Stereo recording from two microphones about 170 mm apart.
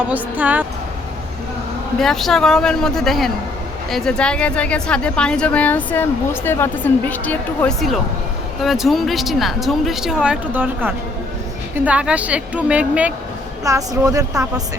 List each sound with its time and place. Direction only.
0.1 s a woman's voice: 10° right (ahead or behind)
2.0 s a woman's voice: centre (ahead or behind)
13.7 s a woman's voice: 20° right (ahead or behind)